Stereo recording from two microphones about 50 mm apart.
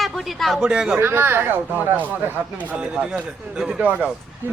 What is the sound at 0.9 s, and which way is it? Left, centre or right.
Speech, right.